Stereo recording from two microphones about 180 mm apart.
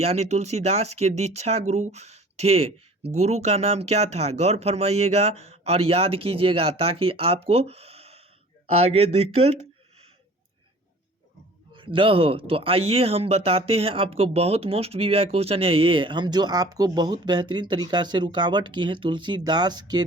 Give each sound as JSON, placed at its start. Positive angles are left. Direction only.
{"t": 0.0, "sound": "speech", "side_deg": -35}
{"t": 11.7, "sound": "speech", "side_deg": -30}